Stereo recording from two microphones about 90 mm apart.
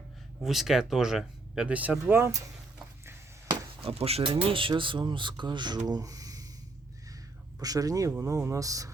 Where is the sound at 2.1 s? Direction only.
30° right (ahead or behind).